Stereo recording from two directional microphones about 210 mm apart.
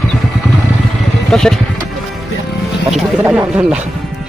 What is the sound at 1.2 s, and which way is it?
Speech, 5° left (ahead or behind).